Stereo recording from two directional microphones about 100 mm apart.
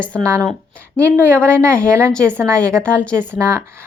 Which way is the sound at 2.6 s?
10° left (ahead or behind).